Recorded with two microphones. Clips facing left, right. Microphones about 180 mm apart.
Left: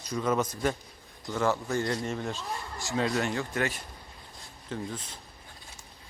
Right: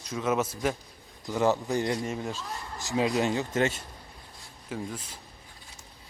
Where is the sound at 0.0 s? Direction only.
Centre (ahead or behind).